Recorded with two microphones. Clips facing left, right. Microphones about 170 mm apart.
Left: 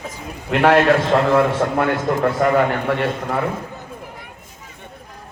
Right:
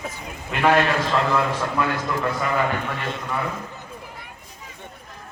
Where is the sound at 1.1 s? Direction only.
55° left (ahead or behind).